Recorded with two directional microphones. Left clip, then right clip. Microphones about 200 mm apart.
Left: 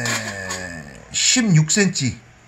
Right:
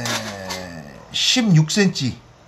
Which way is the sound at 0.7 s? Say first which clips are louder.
Right 1 dB; 20° left (ahead or behind).